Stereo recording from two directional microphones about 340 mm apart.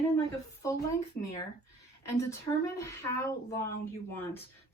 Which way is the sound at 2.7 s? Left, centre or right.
Centre.